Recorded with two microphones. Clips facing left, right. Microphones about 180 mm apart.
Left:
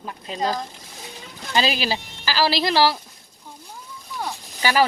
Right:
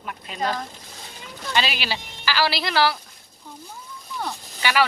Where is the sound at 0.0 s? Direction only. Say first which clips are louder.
Left 2 dB; 25° left (ahead or behind).